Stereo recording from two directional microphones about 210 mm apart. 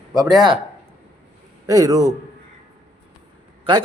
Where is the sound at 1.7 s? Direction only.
15° right (ahead or behind).